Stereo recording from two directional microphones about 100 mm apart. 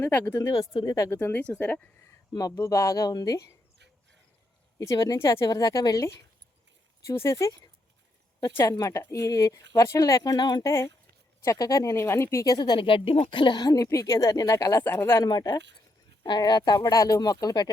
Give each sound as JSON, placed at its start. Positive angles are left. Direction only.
{"t": 0.0, "sound": "speech", "side_deg": 20}
{"t": 0.3, "sound": "speech", "side_deg": 35}
{"t": 1.1, "sound": "speech", "side_deg": 20}
{"t": 2.3, "sound": "speech", "side_deg": 35}
{"t": 4.8, "sound": "speech", "side_deg": 35}
{"t": 8.7, "sound": "speech", "side_deg": 35}
{"t": 10.7, "sound": "speech", "side_deg": 25}
{"t": 12.8, "sound": "speech", "side_deg": 65}
{"t": 14.8, "sound": "speech", "side_deg": 20}
{"t": 15.2, "sound": "speech", "side_deg": 40}